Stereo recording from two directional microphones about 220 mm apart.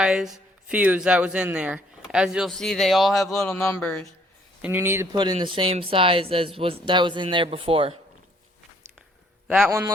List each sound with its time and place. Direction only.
0.0 s speech: 5° right (ahead or behind)
4.6 s speech: 10° right (ahead or behind)
9.5 s speech: centre (ahead or behind)